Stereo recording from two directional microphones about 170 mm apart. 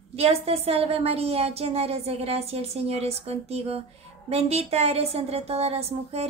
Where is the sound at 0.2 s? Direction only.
35° right (ahead or behind).